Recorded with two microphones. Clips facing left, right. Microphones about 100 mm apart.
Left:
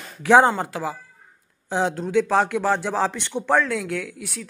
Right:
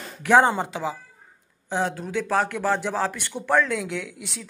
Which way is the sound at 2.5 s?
15° left (ahead or behind).